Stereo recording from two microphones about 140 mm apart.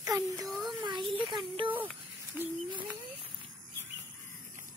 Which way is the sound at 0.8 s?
35° right (ahead or behind).